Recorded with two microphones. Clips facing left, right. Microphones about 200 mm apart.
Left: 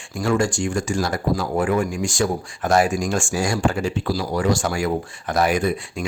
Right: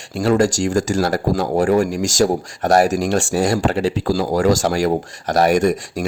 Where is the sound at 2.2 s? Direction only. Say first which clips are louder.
Right 6 dB; 35° right (ahead or behind).